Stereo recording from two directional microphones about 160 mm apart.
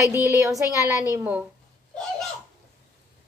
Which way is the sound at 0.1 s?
15° right (ahead or behind).